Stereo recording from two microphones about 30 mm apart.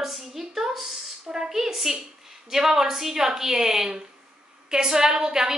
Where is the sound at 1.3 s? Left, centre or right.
Centre.